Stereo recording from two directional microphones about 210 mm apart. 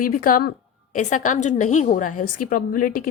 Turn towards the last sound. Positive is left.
turn(degrees=40)  # may be behind; listen again after turning